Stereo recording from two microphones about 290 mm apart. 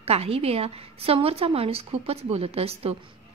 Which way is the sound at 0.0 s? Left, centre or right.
Right.